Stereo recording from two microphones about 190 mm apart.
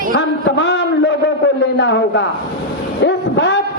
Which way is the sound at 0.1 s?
65° left (ahead or behind).